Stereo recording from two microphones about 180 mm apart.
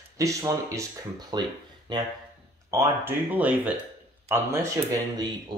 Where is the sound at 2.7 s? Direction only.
15° right (ahead or behind).